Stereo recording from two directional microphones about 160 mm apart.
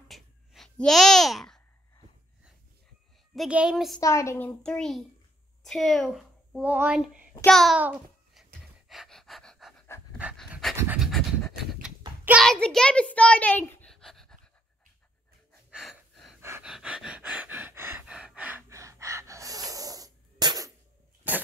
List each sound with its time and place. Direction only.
0.1 s babbling: centre (ahead or behind)
3.3 s a child's voice: 5° right (ahead or behind)
4.0 s a child's voice: 20° left (ahead or behind); by 7.2 s 10° right (ahead or behind)
7.4 s a child's voice: centre (ahead or behind)
7.8 s babbling: 5° right (ahead or behind)
8.8 s pant: centre (ahead or behind)
12.3 s a sound: centre (ahead or behind)
15.7 s gasp: centre (ahead or behind)
16.3 s gasp: 15° right (ahead or behind)
16.6 s a sound: 5° right (ahead or behind)
18.7 s gasp: 20° right (ahead or behind)